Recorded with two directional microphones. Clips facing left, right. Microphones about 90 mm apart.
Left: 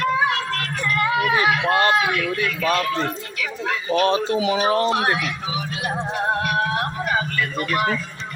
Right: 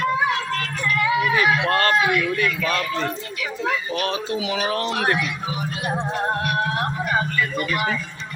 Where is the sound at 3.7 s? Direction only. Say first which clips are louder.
Left 5 dB; 35° left (ahead or behind).